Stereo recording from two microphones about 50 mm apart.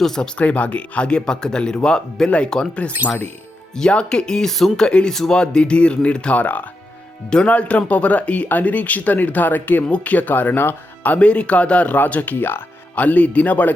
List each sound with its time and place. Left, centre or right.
0.0 s speech: centre
0.3 s speech: left
3.8 s speech: centre
4.9 s speech: centre; by 9.8 s left
9.8 s speech: left
11.0 s speech: left